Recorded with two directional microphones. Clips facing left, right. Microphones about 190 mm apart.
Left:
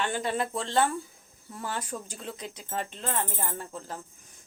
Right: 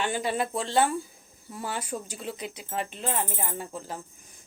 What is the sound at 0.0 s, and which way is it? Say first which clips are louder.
Speech: right 1 dB; 10° right (ahead or behind).